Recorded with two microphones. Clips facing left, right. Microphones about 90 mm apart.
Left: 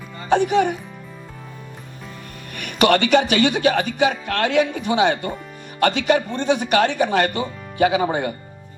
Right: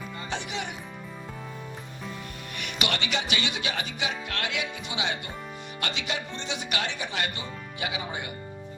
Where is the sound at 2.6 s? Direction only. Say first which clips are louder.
Left 14 dB; 50° left (ahead or behind).